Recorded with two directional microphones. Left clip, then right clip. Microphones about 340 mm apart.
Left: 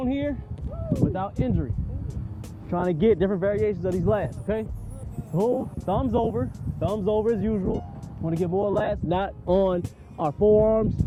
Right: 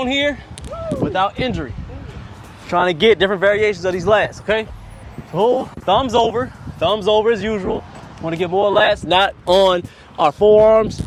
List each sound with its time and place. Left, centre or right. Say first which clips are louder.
0.0 s speech: right 10 dB; centre
5.4 s speech: right 9 dB; right
5.8 s speech: right 11 dB; centre